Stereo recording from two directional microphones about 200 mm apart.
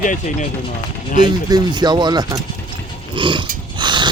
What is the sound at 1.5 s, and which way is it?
Speech, 20° right (ahead or behind).